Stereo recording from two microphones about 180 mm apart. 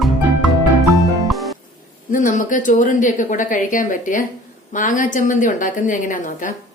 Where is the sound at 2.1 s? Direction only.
45° left (ahead or behind).